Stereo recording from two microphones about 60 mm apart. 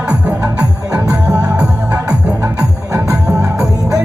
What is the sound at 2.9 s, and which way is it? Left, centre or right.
Music, right.